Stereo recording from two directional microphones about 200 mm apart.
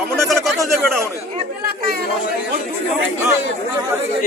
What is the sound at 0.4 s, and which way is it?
Speech, centre (ahead or behind).